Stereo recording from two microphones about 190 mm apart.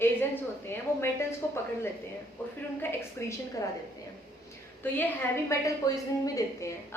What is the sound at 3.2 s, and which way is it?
Speech, 10° left (ahead or behind).